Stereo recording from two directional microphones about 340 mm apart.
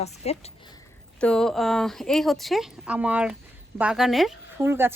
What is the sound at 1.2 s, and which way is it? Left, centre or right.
Speech, centre.